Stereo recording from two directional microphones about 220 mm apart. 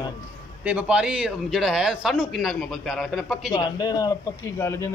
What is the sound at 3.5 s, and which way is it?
A man's voice, 20° left (ahead or behind).